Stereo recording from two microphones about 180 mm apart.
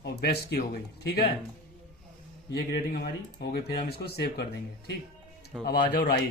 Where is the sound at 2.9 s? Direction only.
60° left (ahead or behind).